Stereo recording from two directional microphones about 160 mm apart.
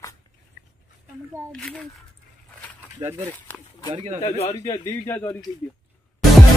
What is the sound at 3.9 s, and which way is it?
Speech, 40° right (ahead or behind).